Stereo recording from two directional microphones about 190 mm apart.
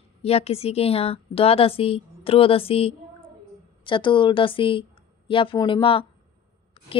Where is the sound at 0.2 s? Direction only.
30° left (ahead or behind).